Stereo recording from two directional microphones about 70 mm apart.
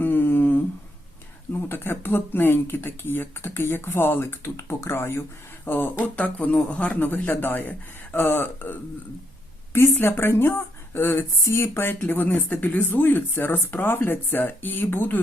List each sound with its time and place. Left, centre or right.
0.0 s humming: left
1.6 s speech: left